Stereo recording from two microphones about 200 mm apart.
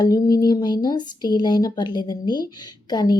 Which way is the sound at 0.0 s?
20° left (ahead or behind).